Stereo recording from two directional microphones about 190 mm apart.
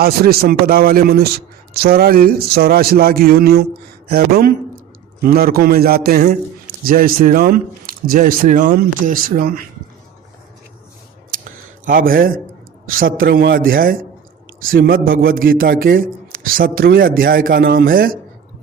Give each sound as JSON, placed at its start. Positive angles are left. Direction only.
{"t": 0.0, "sound": "a man's voice", "side_deg": -55}
{"t": 11.4, "sound": "a sound", "side_deg": -50}
{"t": 13.1, "sound": "a man's voice", "side_deg": -50}